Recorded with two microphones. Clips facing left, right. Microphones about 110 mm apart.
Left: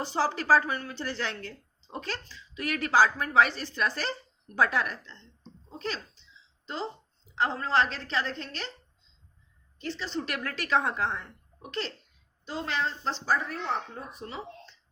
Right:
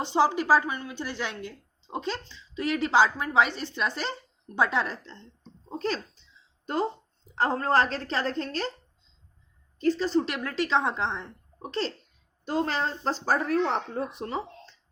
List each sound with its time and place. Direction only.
0.0 s a woman's voice: 20° right (ahead or behind); by 8.7 s 40° right (ahead or behind)
9.7 s a woman's voice: 40° right (ahead or behind)
10.2 s a woman's voice: 25° right (ahead or behind)
12.5 s a woman's voice: 45° right (ahead or behind)
13.5 s speech: 70° right (ahead or behind)
14.3 s speech: 40° right (ahead or behind)